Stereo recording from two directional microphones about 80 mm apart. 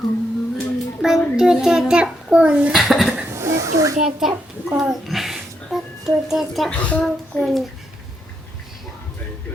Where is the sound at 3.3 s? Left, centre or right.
Right.